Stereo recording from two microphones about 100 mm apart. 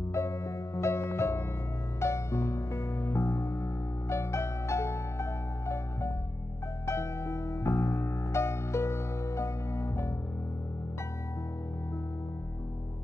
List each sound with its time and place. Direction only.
0.1 s music: 30° left (ahead or behind)